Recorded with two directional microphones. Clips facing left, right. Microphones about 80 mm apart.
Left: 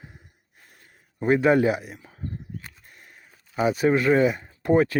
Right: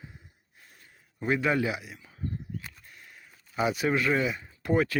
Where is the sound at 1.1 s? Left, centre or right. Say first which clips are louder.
Left 7 dB; left.